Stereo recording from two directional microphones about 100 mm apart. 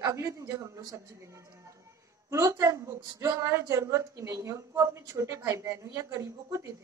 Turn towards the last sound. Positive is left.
turn(degrees=-30)  # may be behind; listen again after turning